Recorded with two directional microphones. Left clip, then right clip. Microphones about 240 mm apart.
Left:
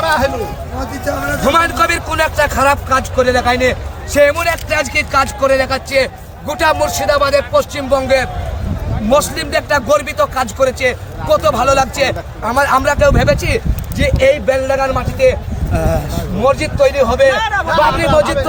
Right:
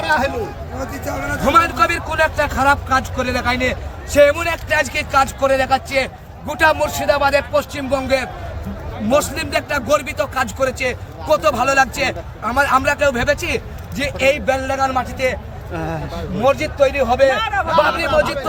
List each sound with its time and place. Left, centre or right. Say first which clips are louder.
0.0 s speech: left 4 dB; centre
1.5 s a man's voice: left 1 dB; centre
15.7 s speech: left 8 dB; left
16.4 s a man's voice: left 3 dB; centre